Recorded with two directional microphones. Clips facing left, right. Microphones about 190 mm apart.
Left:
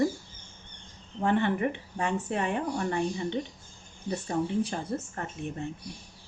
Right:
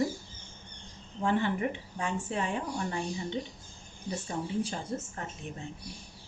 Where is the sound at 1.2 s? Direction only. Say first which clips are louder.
Left 3 dB; 60° left (ahead or behind).